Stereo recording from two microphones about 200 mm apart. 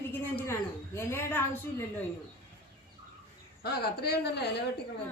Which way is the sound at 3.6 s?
50° left (ahead or behind).